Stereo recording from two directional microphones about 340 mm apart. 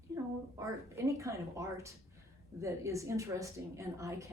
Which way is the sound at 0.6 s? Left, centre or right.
Centre.